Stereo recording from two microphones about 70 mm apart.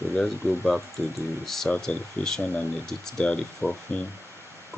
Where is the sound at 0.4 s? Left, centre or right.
Right.